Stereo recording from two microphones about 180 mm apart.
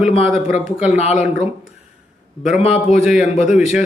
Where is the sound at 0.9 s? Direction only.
40° left (ahead or behind).